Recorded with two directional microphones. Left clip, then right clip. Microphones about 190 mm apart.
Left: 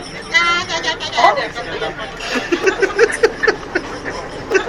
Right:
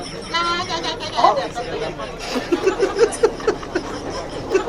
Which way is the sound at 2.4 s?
Centre (ahead or behind).